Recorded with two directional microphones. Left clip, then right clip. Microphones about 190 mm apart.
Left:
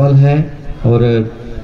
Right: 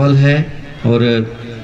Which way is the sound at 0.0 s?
50° left (ahead or behind).